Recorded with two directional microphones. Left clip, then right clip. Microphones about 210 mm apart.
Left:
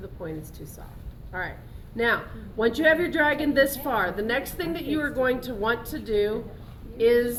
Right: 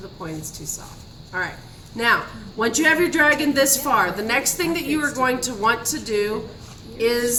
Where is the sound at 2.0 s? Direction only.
20° right (ahead or behind).